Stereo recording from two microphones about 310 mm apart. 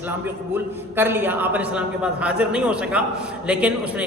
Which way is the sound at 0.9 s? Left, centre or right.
Centre.